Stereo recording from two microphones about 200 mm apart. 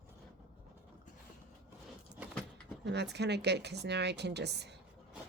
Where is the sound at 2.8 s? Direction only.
55° right (ahead or behind).